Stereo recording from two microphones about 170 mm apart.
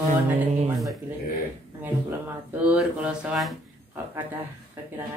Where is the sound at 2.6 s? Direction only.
5° right (ahead or behind).